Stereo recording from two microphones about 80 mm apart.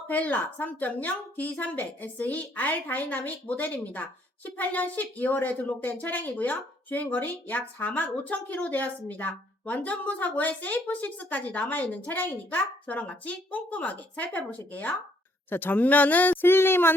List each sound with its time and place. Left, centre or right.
0.1 s a woman's voice: centre